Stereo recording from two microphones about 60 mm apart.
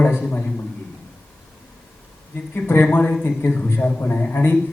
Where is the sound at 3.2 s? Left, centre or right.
Left.